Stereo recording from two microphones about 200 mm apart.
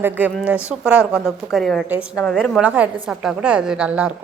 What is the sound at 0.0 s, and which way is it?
A woman's voice, 10° right (ahead or behind).